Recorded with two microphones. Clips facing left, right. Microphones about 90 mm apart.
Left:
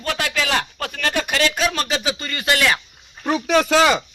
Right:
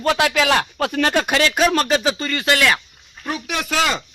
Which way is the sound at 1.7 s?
Centre (ahead or behind).